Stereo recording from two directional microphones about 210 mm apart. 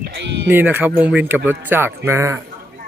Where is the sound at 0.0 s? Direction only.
50° right (ahead or behind).